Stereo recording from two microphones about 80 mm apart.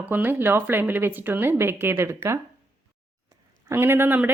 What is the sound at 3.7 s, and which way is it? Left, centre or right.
Speech, right.